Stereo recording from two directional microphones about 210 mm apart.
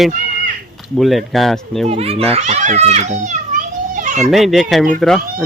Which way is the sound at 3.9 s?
35° right (ahead or behind).